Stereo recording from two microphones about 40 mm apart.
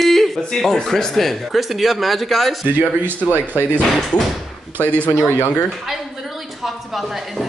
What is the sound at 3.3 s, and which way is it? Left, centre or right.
Speech, right.